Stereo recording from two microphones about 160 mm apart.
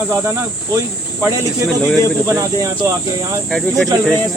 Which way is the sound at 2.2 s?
20° right (ahead or behind).